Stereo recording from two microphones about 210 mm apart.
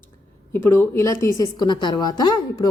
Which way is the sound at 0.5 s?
10° left (ahead or behind).